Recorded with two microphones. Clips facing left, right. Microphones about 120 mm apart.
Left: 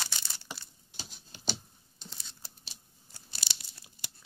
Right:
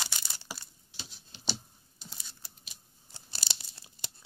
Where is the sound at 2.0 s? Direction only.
10° right (ahead or behind).